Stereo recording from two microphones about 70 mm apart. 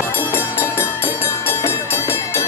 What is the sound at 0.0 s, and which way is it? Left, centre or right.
Music, left.